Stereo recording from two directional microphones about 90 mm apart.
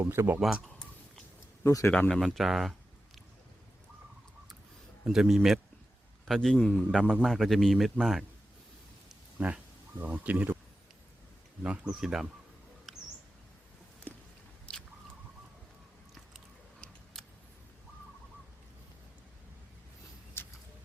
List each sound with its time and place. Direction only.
0.0 s speech: 25° right (ahead or behind)
0.3 s speech: 5° right (ahead or behind)
1.6 s speech: 35° left (ahead or behind)
1.9 s speech: 10° left (ahead or behind)
5.0 s a man's voice: 5° right (ahead or behind)
9.4 s speech: 20° right (ahead or behind)
11.6 s speech: 10° right (ahead or behind)
12.9 s a sound: 5° left (ahead or behind)
14.7 s biting: 10° left (ahead or behind)
20.4 s a sound: 25° left (ahead or behind)